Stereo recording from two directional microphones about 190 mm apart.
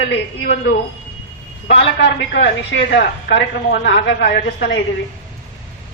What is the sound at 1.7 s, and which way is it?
A woman's voice, 70° left (ahead or behind).